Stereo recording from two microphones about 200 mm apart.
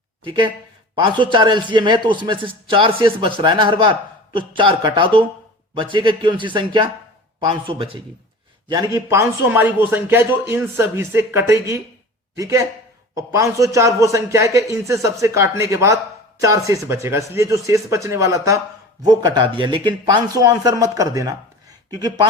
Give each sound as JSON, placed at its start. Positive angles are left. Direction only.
{"t": 0.3, "sound": "a man's voice", "side_deg": -25}